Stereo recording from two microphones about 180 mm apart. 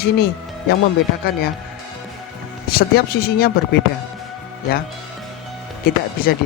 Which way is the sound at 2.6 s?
55° left (ahead or behind).